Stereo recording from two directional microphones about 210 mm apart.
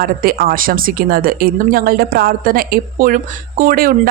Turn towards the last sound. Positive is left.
turn(degrees=-45)  # may be behind; listen again after turning